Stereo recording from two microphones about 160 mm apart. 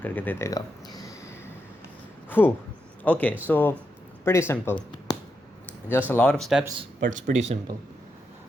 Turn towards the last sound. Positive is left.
turn(degrees=-45)  # may be behind; listen again after turning